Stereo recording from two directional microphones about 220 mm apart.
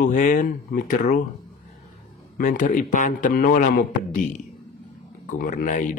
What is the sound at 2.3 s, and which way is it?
A man's voice, 35° left (ahead or behind).